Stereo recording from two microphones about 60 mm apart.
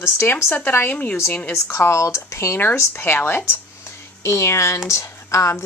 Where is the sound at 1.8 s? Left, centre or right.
Left.